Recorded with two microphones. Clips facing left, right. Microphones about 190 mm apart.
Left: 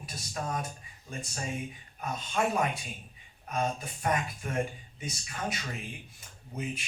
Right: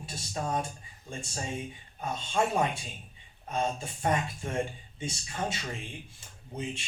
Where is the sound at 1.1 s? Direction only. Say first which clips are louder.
Even; 25° right (ahead or behind).